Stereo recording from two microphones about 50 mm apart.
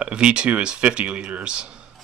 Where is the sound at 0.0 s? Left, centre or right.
Right.